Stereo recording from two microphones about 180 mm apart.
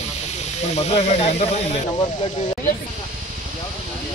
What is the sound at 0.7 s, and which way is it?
Speech, 35° left (ahead or behind).